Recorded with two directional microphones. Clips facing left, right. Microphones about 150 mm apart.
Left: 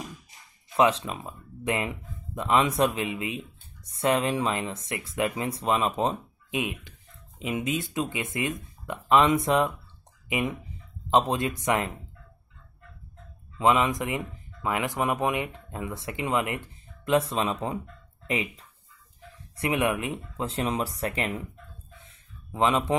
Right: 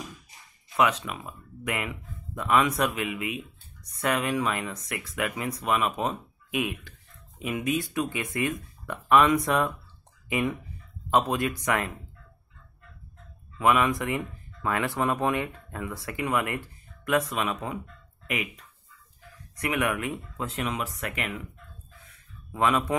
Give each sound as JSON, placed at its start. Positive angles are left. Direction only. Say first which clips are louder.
{"t": 0.7, "sound": "speech", "louder": "left 2 dB", "side_deg": 30}
{"t": 13.6, "sound": "speech", "louder": "even", "side_deg": 20}
{"t": 21.9, "sound": "a sound", "louder": "left 1 dB", "side_deg": 25}